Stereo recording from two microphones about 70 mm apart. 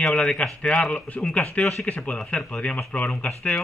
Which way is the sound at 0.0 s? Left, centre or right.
Centre.